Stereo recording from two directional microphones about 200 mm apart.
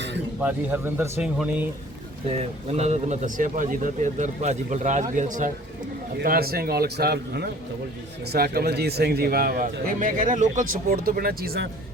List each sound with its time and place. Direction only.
0.4 s speech: 10° right (ahead or behind)
2.3 s speech: 35° right (ahead or behind); by 11.7 s 50° right (ahead or behind)